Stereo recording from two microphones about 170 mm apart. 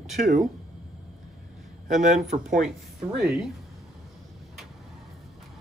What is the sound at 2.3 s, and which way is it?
Speech, 45° right (ahead or behind).